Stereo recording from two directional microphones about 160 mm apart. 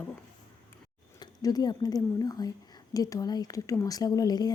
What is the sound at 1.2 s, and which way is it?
Speech, 25° left (ahead or behind).